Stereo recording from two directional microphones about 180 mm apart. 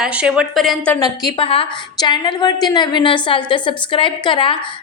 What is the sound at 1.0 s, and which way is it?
A woman's voice, 20° left (ahead or behind).